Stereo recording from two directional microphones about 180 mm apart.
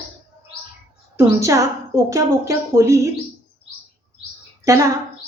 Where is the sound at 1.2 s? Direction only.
15° right (ahead or behind).